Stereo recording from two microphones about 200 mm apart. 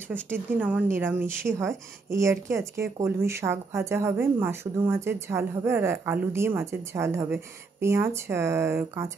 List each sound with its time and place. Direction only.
0.3 s a woman's voice: 10° right (ahead or behind)